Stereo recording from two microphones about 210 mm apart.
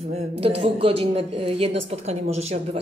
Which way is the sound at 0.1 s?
30° right (ahead or behind).